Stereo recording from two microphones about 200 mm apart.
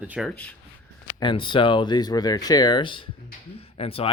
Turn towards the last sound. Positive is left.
turn(degrees=30)  # may be behind; listen again after turning